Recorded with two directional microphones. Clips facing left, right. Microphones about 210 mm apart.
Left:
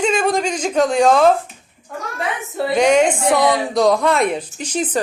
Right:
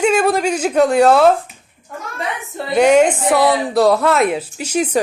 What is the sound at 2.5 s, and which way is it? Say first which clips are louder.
Speech: right 2 dB; 5° right (ahead or behind).